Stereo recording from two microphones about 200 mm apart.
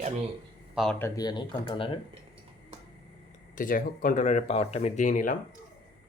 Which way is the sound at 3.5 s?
45° left (ahead or behind).